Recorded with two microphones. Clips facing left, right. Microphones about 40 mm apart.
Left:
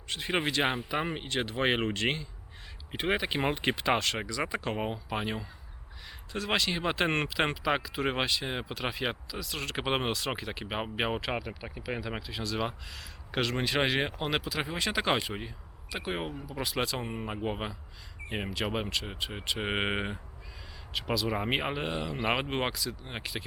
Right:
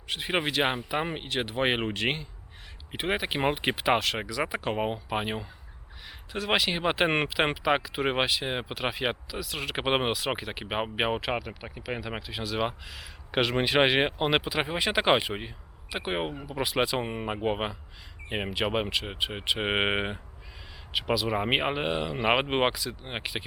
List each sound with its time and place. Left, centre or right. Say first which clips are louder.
0.1 s speech: right 2 dB; centre
11.3 s speech: right 2 dB; centre; by 16.3 s right
16.5 s speech: right 5 dB; centre
17.0 s speech: right 5 dB; right
20.9 s speech: right 4 dB; centre; by 23.2 s right